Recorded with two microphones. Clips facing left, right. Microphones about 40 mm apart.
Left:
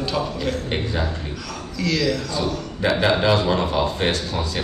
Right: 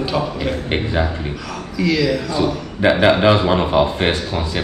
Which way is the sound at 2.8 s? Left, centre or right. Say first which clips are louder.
Right 6 dB; right.